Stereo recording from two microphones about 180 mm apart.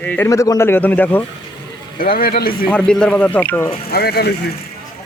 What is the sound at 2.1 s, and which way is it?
Speech, 60° left (ahead or behind).